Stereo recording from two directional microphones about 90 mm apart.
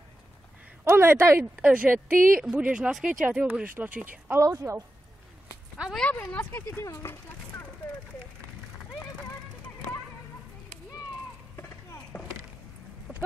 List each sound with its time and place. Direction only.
0.8 s speech: 30° right (ahead or behind)
1.4 s speech: 15° right (ahead or behind)
3.3 s speech: 15° right (ahead or behind)
4.4 s a woman's voice: 35° right (ahead or behind)
5.9 s speech: 15° left (ahead or behind)
6.8 s speech: 40° left (ahead or behind)
11.5 s clip-clop: 30° left (ahead or behind)
13.1 s a sound: 5° right (ahead or behind)